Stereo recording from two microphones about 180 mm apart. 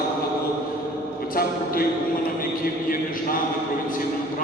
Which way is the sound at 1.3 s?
55° left (ahead or behind).